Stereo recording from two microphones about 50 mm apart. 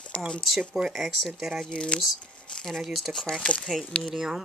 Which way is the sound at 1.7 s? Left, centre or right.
Left.